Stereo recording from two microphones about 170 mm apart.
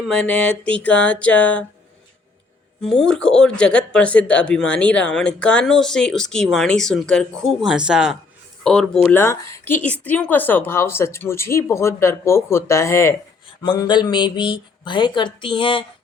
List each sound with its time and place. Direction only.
0.0 s speech: 5° left (ahead or behind)
2.9 s speech: 5° left (ahead or behind)
9.1 s speech: 15° left (ahead or behind)